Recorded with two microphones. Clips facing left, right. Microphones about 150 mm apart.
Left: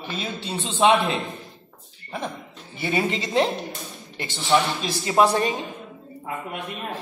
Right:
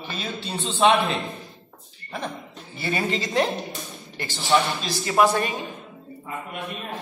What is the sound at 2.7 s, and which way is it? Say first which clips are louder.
A woman's voice: left 1 dB; 20° left (ahead or behind).